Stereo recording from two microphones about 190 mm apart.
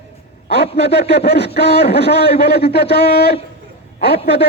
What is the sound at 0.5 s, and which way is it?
Speech, 60° left (ahead or behind).